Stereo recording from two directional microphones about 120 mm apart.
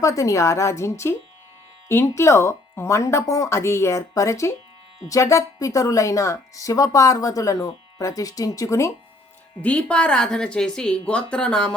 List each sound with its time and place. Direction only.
0.0 s speech: 25° left (ahead or behind)
9.6 s speech: 10° left (ahead or behind)